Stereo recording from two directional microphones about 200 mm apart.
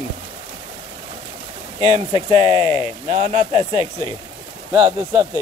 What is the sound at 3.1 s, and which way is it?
Speech, 35° right (ahead or behind).